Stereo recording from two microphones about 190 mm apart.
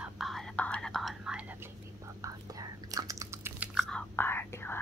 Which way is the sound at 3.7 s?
5° left (ahead or behind).